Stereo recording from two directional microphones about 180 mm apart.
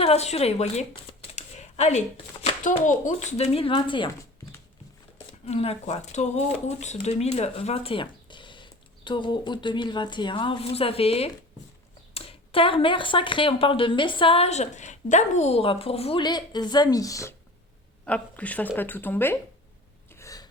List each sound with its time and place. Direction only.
0.0 s speech: 35° left (ahead or behind)
1.3 s shuffling cards: 40° left (ahead or behind)
2.6 s speech: 45° left (ahead or behind); by 4.1 s 25° left (ahead or behind)
5.5 s speech: 35° left (ahead or behind); by 17.3 s 20° left (ahead or behind)
18.0 s speech: 10° left (ahead or behind)
20.1 s gasp: 15° left (ahead or behind)